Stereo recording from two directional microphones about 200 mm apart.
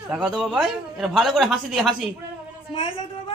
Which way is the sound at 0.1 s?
5° right (ahead or behind).